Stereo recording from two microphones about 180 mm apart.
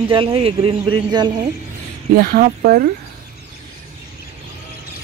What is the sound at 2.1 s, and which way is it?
Speech, 50° right (ahead or behind).